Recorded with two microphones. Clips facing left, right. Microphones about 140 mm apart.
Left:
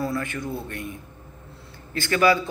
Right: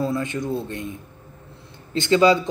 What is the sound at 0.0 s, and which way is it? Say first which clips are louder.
Speech: right 3 dB; 20° right (ahead or behind).